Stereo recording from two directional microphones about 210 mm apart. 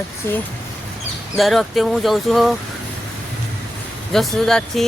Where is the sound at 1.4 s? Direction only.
Centre (ahead or behind).